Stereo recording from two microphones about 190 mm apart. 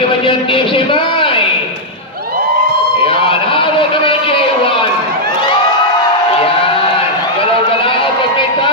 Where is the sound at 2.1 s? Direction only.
50° right (ahead or behind).